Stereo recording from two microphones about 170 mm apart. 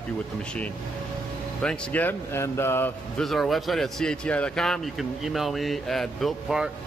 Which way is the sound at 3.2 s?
Centre (ahead or behind).